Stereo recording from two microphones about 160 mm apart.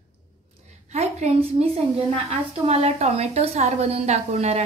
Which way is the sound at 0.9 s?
45° right (ahead or behind).